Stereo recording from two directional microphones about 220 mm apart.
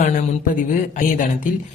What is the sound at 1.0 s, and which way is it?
Speech, 35° left (ahead or behind).